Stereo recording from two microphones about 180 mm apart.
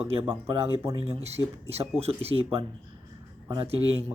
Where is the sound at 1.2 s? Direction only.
35° right (ahead or behind).